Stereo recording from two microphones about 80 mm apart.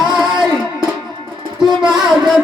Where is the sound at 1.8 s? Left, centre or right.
Centre.